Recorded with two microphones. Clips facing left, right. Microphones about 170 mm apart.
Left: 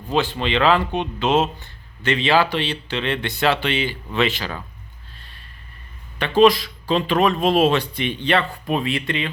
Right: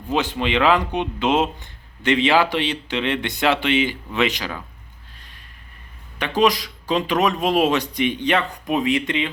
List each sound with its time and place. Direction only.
0.1 s speech: 15° right (ahead or behind)
6.1 s speech: 15° right (ahead or behind)